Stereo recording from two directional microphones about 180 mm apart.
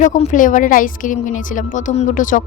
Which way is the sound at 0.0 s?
45° left (ahead or behind).